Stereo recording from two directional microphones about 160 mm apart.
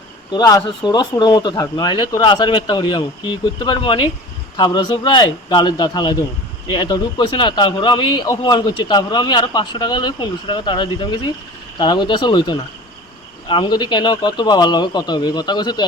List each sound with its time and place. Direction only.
0.3 s speech: 25° left (ahead or behind)